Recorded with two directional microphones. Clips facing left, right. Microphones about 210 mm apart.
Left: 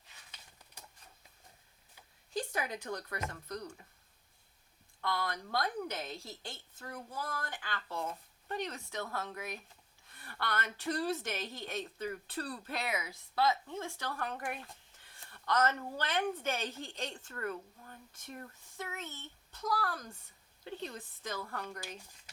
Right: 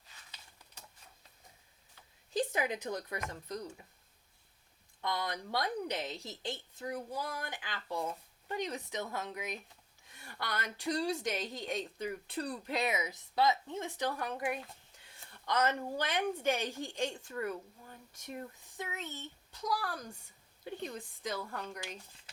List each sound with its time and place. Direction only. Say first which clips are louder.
2.4 s speech: right 5 dB; 20° right (ahead or behind)
4.9 s a woman's voice: even; 20° right (ahead or behind)